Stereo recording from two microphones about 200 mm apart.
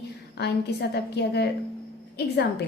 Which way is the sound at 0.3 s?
55° left (ahead or behind).